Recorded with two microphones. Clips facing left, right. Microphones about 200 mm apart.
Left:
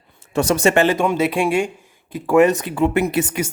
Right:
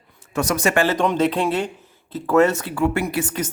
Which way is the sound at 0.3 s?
30° left (ahead or behind).